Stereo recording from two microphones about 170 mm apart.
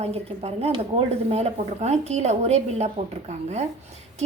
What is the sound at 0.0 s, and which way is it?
Speech, 35° right (ahead or behind).